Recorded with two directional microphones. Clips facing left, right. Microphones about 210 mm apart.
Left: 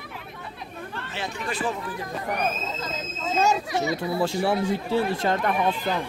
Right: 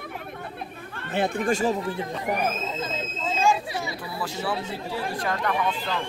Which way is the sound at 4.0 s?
25° left (ahead or behind).